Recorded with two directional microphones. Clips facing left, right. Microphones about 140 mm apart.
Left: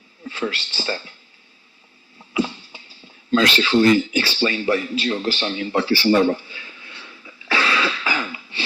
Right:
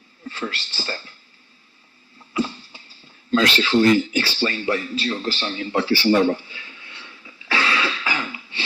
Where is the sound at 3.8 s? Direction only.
40° right (ahead or behind).